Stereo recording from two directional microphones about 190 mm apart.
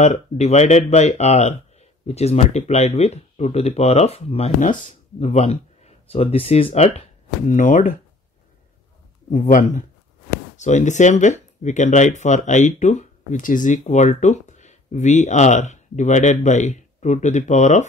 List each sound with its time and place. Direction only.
0.0 s speech: 35° left (ahead or behind)
9.3 s speech: 45° left (ahead or behind)